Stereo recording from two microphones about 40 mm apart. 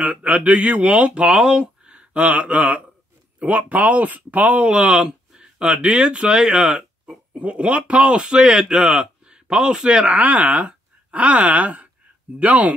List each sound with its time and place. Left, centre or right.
0.0 s speech: right
1.3 s speech: centre
2.0 s speech: right
4.6 s speech: right
7.3 s speech: right